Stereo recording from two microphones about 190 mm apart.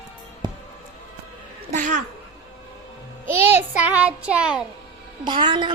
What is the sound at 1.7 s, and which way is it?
Speech, 40° right (ahead or behind).